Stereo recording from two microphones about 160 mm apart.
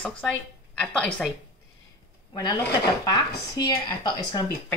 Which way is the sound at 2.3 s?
25° left (ahead or behind).